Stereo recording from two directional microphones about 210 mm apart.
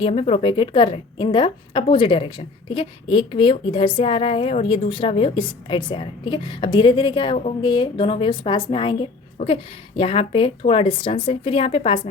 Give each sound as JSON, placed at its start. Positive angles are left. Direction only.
{"t": 0.0, "sound": "a woman's voice", "side_deg": 25}